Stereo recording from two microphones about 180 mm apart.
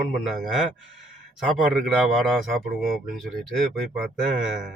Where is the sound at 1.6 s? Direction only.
Centre (ahead or behind).